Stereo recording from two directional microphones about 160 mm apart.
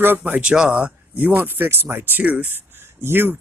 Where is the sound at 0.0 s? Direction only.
10° right (ahead or behind).